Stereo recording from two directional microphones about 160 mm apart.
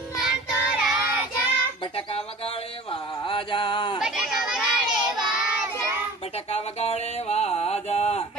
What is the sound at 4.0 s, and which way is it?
Children playing, 5° right (ahead or behind).